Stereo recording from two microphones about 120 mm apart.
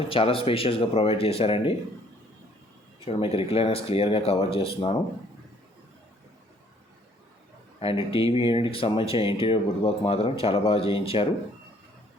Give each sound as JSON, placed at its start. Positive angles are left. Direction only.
{"t": 0.0, "sound": "speech", "side_deg": 50}
{"t": 3.0, "sound": "speech", "side_deg": 55}
{"t": 7.8, "sound": "speech", "side_deg": 50}